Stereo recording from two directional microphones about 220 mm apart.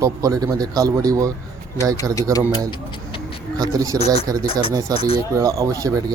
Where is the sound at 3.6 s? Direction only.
15° right (ahead or behind).